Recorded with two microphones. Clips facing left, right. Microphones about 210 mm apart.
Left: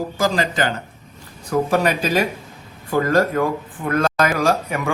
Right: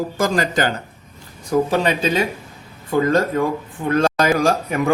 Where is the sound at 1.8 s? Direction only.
25° right (ahead or behind).